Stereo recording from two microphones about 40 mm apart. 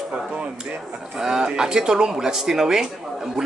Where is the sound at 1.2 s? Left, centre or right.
Centre.